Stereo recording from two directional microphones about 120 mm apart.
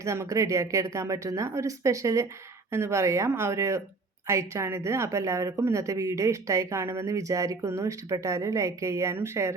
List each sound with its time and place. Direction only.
0.0 s speech: 25° right (ahead or behind)